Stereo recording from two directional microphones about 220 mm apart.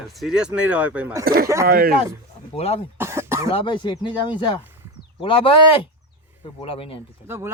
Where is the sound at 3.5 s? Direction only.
25° left (ahead or behind).